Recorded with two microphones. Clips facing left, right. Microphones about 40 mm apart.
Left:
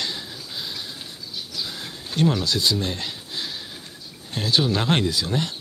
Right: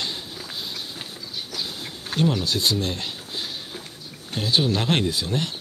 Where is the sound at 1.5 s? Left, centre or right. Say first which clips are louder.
Even; right.